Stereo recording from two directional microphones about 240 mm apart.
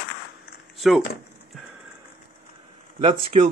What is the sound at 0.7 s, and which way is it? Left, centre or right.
Speech, centre.